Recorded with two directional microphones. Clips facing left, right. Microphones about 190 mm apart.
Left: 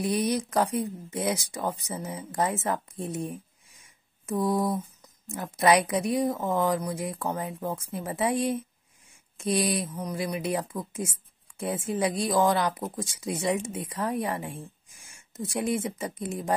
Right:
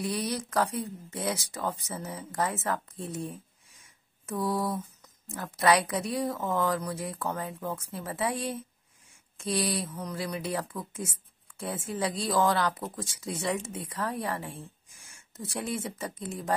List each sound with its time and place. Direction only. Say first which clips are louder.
0.0 s speech: left 5 dB; 20° left (ahead or behind)